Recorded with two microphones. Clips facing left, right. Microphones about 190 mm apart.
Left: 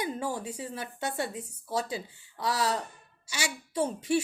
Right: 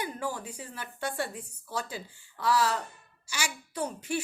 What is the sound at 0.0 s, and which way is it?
A woman's voice, 25° left (ahead or behind).